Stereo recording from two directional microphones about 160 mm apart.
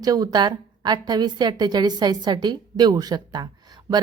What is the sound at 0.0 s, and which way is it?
A woman's voice, 25° right (ahead or behind).